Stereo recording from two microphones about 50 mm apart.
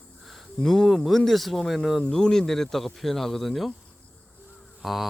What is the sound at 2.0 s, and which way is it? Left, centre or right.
Speech, centre.